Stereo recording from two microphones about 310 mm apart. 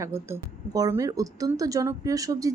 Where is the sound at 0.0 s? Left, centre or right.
Centre.